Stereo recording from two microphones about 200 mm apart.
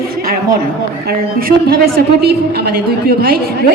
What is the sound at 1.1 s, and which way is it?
A woman's voice, 50° right (ahead or behind).